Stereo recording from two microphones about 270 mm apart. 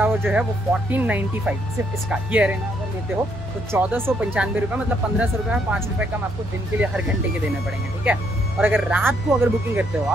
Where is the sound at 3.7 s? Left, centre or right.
Centre.